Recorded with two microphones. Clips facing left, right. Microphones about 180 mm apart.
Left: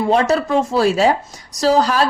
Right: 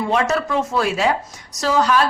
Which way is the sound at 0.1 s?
35° left (ahead or behind).